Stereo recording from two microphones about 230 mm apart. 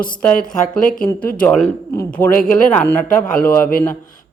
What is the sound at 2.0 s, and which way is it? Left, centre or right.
Speech, centre.